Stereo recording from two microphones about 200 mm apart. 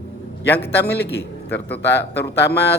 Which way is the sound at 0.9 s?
55° left (ahead or behind).